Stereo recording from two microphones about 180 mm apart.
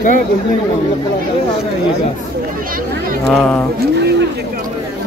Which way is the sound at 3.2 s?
Centre (ahead or behind).